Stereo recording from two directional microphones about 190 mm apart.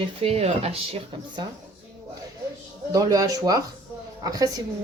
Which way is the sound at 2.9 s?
20° right (ahead or behind).